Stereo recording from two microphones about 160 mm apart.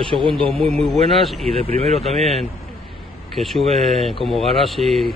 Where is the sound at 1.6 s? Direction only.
45° right (ahead or behind).